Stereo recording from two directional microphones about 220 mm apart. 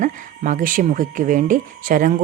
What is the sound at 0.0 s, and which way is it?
Speech, 35° right (ahead or behind).